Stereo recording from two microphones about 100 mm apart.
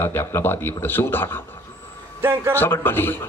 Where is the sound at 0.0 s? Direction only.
25° left (ahead or behind).